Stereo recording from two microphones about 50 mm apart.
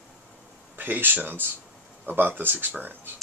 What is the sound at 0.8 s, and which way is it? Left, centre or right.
Speech, right.